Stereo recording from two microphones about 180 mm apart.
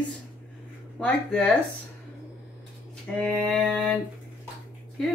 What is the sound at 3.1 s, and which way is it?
Speech, 5° left (ahead or behind).